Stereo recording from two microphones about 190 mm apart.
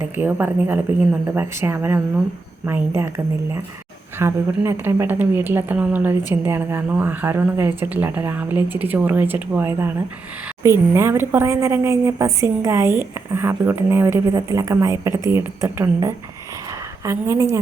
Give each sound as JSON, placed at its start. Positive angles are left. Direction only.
{"t": 0.0, "sound": "a woman's voice", "side_deg": -10}
{"t": 4.2, "sound": "a woman's voice", "side_deg": -10}